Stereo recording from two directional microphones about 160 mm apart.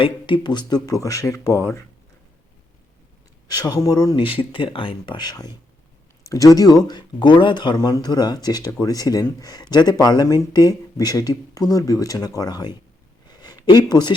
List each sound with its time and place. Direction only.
0.0 s speech: 30° left (ahead or behind)
3.5 s speech: 25° left (ahead or behind)
13.2 s a sound: 25° left (ahead or behind)